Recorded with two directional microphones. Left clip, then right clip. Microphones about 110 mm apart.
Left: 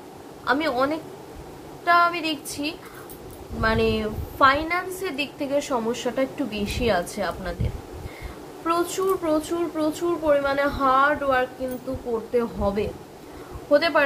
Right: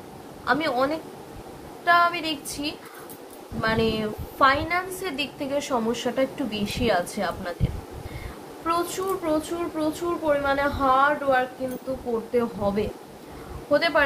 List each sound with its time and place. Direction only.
0.5 s a woman's voice: 30° left (ahead or behind)
8.8 s a child's voice: 50° left (ahead or behind)
9.3 s a child's voice: 65° left (ahead or behind)
12.4 s a woman's voice: 20° left (ahead or behind)